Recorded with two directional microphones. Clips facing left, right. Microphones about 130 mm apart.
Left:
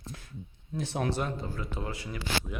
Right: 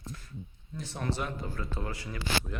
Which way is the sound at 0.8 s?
65° left (ahead or behind).